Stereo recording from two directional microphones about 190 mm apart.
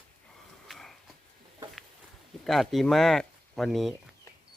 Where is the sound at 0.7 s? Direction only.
Centre (ahead or behind).